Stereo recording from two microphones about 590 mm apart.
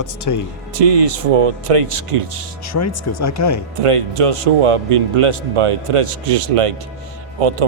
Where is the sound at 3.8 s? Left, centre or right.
Right.